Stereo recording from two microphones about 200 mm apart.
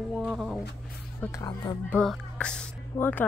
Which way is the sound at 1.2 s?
15° left (ahead or behind).